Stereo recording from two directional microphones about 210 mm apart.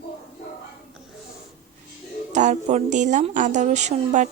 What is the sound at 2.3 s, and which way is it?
Speech, 35° right (ahead or behind).